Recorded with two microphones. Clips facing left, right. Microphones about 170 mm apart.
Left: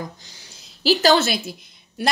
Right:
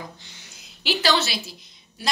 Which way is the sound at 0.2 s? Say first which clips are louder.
Left 1 dB; 35° left (ahead or behind).